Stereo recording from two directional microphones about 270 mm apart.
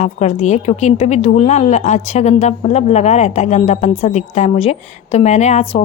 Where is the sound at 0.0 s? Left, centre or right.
Left.